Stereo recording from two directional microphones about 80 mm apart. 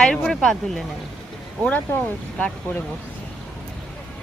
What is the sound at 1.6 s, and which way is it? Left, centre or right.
Speech, centre.